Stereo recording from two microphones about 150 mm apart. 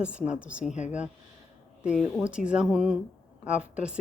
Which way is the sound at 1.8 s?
5° right (ahead or behind).